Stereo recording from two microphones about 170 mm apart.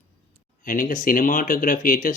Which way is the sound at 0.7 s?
50° left (ahead or behind).